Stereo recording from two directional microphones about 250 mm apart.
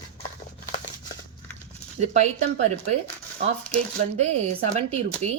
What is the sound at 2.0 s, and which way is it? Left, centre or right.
Speech, right.